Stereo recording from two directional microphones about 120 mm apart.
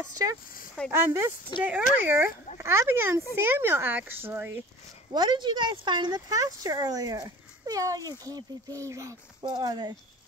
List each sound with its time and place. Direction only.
0.2 s speech: 35° right (ahead or behind)
0.9 s speech: 20° right (ahead or behind)
1.5 s speech: 40° left (ahead or behind)
2.0 s speech: 15° right (ahead or behind)
5.1 s speech: 40° right (ahead or behind)